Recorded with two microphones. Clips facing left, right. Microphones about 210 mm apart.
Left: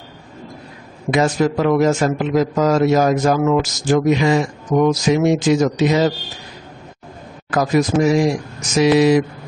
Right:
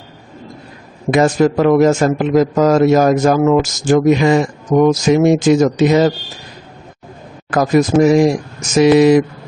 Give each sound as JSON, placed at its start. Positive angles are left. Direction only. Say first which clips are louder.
{"t": 1.1, "sound": "a man's voice", "louder": "right 4 dB", "side_deg": -50}
{"t": 7.5, "sound": "a man's voice", "louder": "right 4 dB", "side_deg": -50}